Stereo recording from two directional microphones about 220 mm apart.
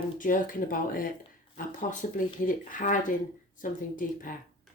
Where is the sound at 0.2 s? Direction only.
40° left (ahead or behind).